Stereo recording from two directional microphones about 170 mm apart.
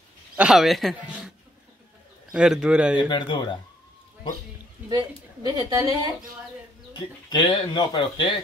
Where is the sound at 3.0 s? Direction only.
30° left (ahead or behind).